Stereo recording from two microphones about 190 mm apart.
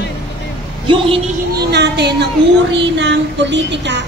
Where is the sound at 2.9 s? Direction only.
70° right (ahead or behind).